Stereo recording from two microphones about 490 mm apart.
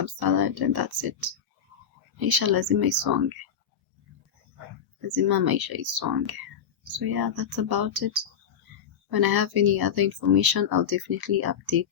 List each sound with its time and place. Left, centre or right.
0.0 s speech: right
5.0 s speech: right